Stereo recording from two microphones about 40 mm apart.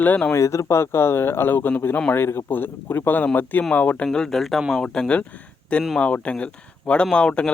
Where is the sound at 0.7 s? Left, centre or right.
Left.